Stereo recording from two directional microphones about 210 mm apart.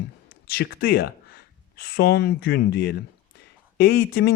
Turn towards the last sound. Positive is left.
turn(degrees=50)  # may be behind; listen again after turning